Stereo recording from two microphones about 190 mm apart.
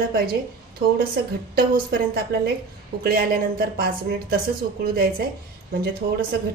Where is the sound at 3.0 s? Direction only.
50° right (ahead or behind).